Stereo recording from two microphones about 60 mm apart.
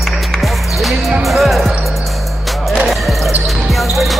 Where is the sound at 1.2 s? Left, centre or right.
Centre.